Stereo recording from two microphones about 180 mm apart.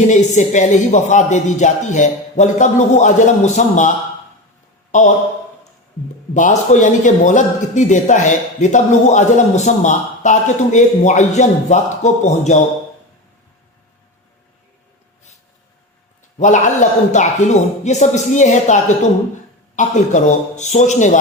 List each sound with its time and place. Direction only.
0.1 s a man's voice: 40° left (ahead or behind)
6.3 s a man's voice: 40° left (ahead or behind)
16.4 s a man's voice: 40° left (ahead or behind)